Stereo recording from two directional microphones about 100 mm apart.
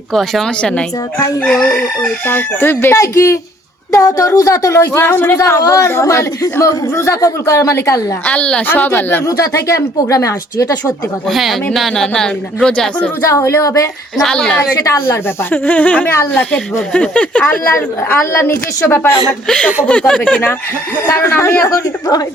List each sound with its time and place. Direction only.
0.1 s a woman's voice: 5° left (ahead or behind)
2.2 s a woman's voice: 20° left (ahead or behind)
4.9 s a woman's voice: 20° left (ahead or behind)
8.2 s a woman's voice: 10° left (ahead or behind)
9.2 s speech: 30° left (ahead or behind)
11.3 s a woman's voice: centre (ahead or behind)
13.2 s speech: 30° left (ahead or behind)
14.2 s a woman's voice: 5° left (ahead or behind)
14.8 s a woman's voice: 25° left (ahead or behind)
19.5 s a woman's voice: 10° left (ahead or behind)
21.1 s a woman's voice: 25° left (ahead or behind)